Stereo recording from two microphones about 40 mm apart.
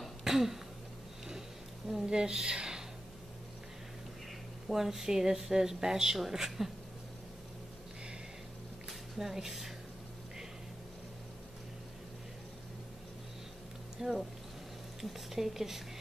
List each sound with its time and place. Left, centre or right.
0.2 s throat clearing: centre
1.9 s a woman's voice: centre
4.6 s speech: centre
8.8 s a sound: centre
13.9 s speech: centre